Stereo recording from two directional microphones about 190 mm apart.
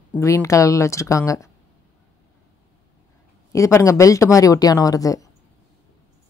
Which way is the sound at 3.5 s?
15° left (ahead or behind).